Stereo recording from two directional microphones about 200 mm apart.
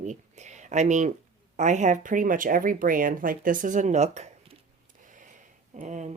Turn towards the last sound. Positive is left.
turn(degrees=-35)  # may be behind; listen again after turning